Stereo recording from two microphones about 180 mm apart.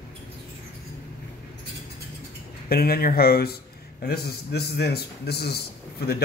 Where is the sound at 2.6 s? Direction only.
55° left (ahead or behind).